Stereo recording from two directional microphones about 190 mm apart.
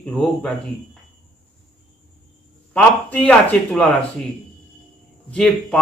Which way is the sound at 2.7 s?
5° left (ahead or behind).